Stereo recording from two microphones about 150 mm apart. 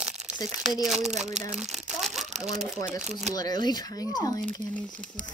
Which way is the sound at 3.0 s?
5° right (ahead or behind).